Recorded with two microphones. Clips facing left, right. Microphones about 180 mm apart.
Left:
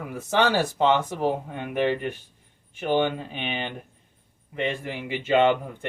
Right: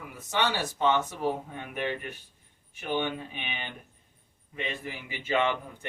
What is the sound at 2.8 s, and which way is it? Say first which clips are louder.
Speech: left 7 dB; 50° left (ahead or behind).